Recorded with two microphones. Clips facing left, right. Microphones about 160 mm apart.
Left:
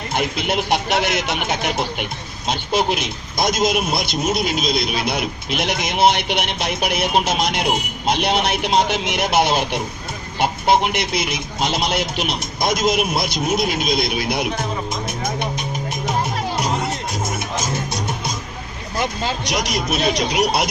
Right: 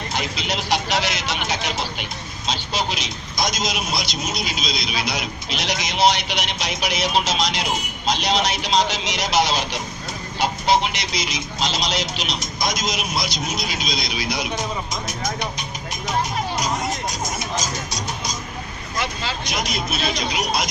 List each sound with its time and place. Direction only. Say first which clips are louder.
0.1 s a man's voice: left 7 dB; 55° left (ahead or behind)
17.2 s music: left 3 dB; 55° left (ahead or behind)
19.5 s a man's voice: left 3 dB; 75° left (ahead or behind)